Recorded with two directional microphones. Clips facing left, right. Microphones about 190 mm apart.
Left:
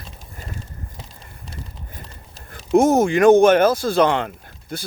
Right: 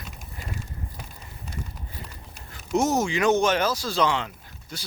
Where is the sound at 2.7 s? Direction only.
55° left (ahead or behind).